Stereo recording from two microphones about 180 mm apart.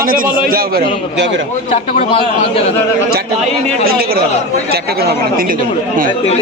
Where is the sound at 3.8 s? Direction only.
55° right (ahead or behind).